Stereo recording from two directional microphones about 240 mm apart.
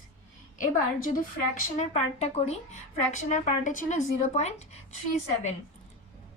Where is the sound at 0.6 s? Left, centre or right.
Left.